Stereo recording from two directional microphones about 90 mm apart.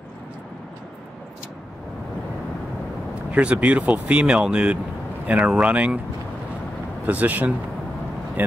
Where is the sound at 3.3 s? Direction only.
15° right (ahead or behind).